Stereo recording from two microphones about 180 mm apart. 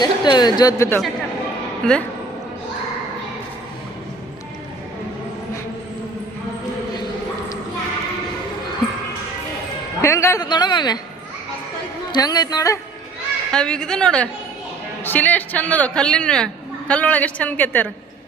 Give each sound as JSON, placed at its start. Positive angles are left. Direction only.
{"t": 0.0, "sound": "a woman's voice", "side_deg": 25}
{"t": 10.0, "sound": "a woman's voice", "side_deg": 15}
{"t": 12.1, "sound": "a woman's voice", "side_deg": 20}
{"t": 13.5, "sound": "a woman's voice", "side_deg": 5}